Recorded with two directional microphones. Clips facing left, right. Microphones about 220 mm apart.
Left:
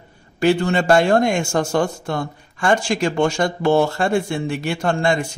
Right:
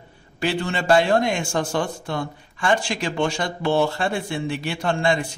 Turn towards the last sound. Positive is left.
turn(degrees=45)  # may be behind; listen again after turning